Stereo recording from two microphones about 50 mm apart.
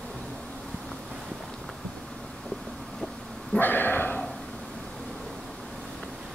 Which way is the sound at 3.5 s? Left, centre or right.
Left.